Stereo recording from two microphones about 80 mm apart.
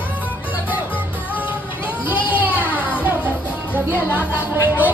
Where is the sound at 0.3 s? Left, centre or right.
Centre.